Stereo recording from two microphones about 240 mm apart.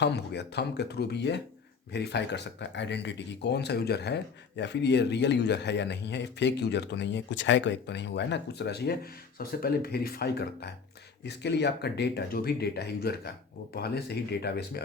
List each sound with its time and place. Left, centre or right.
0.0 s speech: left